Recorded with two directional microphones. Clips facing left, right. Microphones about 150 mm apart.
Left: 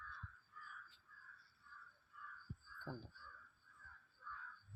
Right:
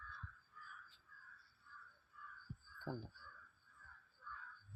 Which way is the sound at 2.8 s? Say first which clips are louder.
Right 4 dB; 15° right (ahead or behind).